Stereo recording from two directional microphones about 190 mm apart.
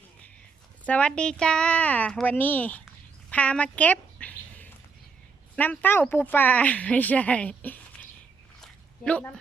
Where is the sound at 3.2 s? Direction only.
5° left (ahead or behind).